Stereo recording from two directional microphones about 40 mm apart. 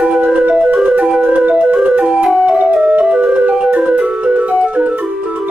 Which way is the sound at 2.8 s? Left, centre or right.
Right.